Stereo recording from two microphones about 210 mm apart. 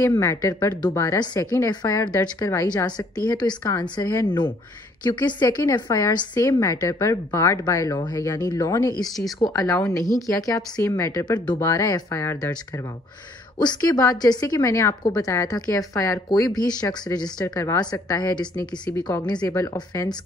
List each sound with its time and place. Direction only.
0.0 s a woman's voice: 15° left (ahead or behind)
9.0 s speech: centre (ahead or behind)
9.6 s a woman's voice: 15° left (ahead or behind)